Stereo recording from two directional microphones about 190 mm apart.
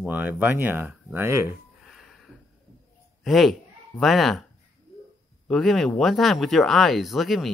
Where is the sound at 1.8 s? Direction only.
Centre (ahead or behind).